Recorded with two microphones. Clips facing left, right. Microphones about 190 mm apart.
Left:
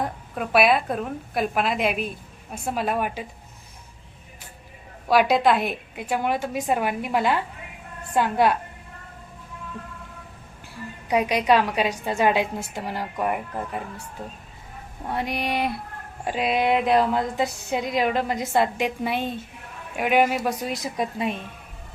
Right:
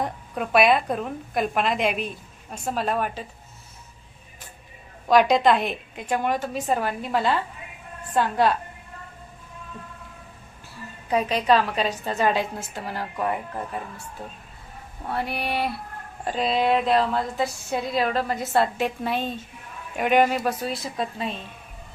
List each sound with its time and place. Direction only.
0.0 s a woman's voice: centre (ahead or behind)
5.0 s a woman's voice: 5° left (ahead or behind)
11.1 s a woman's voice: 10° left (ahead or behind)
15.0 s a woman's voice: 15° left (ahead or behind)